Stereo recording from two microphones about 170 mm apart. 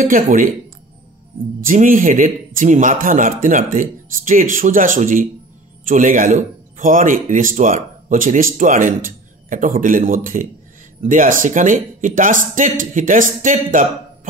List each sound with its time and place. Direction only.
0.0 s a man's voice: 50° right (ahead or behind)
1.6 s a man's voice: 55° right (ahead or behind)